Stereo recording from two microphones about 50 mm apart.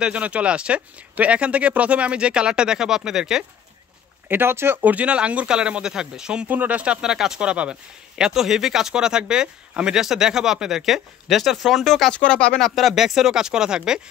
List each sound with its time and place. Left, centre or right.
0.0 s speech: right
4.3 s speech: right
4.8 s speech: right
6.4 s speech: right
7.0 s speech: centre
7.3 s speech: right
8.2 s speech: centre
12.1 s speech: left
12.6 s speech: centre